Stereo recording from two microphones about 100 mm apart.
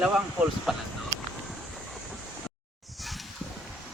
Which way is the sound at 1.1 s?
30° left (ahead or behind).